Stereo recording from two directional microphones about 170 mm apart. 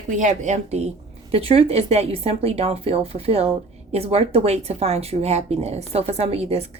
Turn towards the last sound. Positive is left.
turn(degrees=-35)  # may be behind; listen again after turning